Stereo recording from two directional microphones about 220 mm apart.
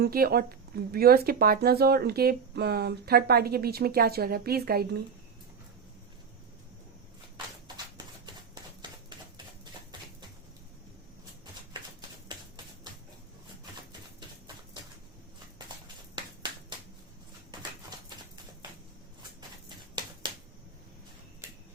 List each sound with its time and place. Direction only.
0.0 s speech: 45° right (ahead or behind)
7.9 s typewriter: 20° right (ahead or behind)
14.2 s typewriter: 20° right (ahead or behind)
16.1 s finger snapping: 20° right (ahead or behind)
19.4 s a sound: 20° right (ahead or behind)